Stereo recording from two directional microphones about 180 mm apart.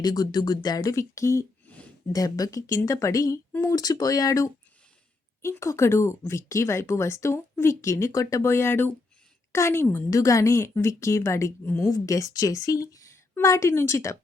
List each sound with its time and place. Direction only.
0.0 s speech: 20° left (ahead or behind)
2.1 s a woman's voice: 20° left (ahead or behind)